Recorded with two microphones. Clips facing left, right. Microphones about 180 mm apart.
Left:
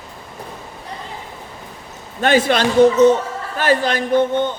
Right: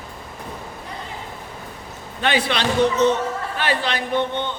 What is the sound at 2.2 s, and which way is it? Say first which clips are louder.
Speech: left 6 dB; 45° left (ahead or behind).